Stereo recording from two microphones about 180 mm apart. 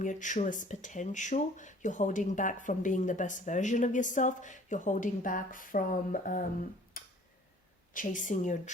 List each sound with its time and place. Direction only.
0.0 s speech: 45° left (ahead or behind)
7.0 s tick-tock: 50° left (ahead or behind)
7.9 s speech: 45° left (ahead or behind)